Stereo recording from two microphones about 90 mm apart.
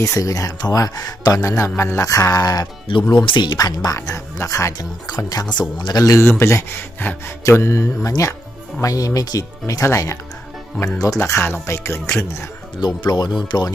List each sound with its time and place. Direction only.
0.0 s speech: 35° left (ahead or behind)
1.4 s speech: 30° left (ahead or behind); by 3.8 s 50° left (ahead or behind)
3.8 s speech: 40° left (ahead or behind)
5.5 s speech: 55° left (ahead or behind)
11.2 s speech: 30° left (ahead or behind)
12.8 s speech: 50° left (ahead or behind)